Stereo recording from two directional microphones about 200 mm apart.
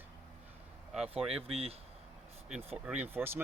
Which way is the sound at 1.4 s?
30° right (ahead or behind).